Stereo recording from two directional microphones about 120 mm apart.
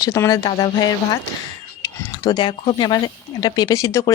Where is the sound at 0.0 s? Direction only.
25° left (ahead or behind).